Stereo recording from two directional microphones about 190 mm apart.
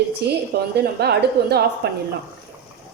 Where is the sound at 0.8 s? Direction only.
60° right (ahead or behind).